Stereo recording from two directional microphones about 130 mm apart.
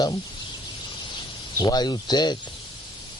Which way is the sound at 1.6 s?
30° left (ahead or behind).